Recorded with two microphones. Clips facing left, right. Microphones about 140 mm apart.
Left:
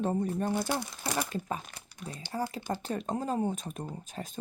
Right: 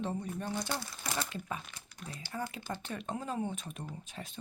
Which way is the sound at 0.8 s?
20° left (ahead or behind).